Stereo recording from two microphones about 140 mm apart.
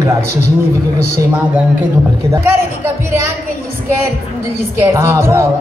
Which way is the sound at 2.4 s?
20° right (ahead or behind).